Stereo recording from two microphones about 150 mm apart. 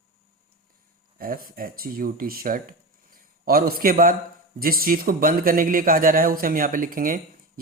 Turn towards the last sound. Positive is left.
turn(degrees=-65)  # may be behind; listen again after turning